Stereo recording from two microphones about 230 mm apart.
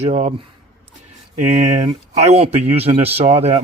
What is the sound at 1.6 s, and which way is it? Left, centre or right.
Speech, right.